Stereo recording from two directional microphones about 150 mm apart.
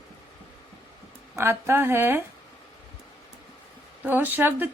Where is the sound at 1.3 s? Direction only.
15° right (ahead or behind).